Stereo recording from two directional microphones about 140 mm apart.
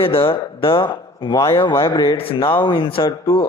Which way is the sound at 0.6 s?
35° left (ahead or behind).